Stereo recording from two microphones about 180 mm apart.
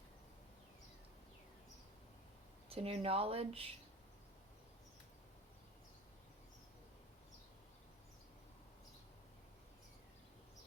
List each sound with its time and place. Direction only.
2.6 s speech: 35° right (ahead or behind)